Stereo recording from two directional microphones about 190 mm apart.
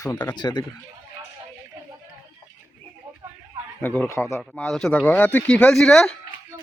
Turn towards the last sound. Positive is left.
turn(degrees=5)  # may be behind; listen again after turning